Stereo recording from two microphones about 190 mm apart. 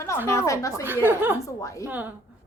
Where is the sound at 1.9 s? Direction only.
10° right (ahead or behind).